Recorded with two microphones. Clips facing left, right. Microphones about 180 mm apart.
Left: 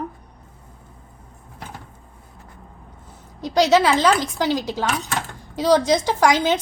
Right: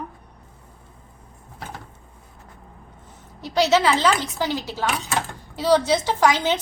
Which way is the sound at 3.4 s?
15° left (ahead or behind).